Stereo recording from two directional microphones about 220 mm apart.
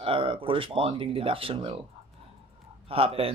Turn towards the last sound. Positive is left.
turn(degrees=-25)  # may be behind; listen again after turning